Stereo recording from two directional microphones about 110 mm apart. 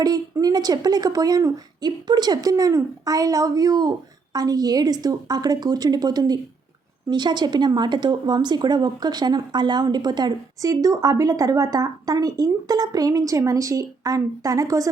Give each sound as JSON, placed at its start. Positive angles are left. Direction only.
{"t": 0.0, "sound": "a woman's voice", "side_deg": -35}